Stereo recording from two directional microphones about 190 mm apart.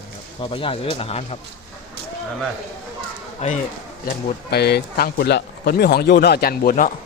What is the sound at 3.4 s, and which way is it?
Speech, 35° left (ahead or behind).